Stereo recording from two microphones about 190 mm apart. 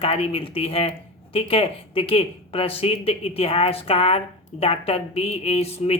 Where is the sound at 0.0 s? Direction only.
30° left (ahead or behind).